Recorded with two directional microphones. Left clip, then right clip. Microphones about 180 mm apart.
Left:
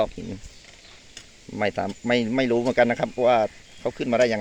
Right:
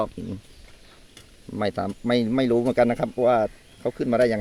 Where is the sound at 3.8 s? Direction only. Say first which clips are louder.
Even; 15° right (ahead or behind).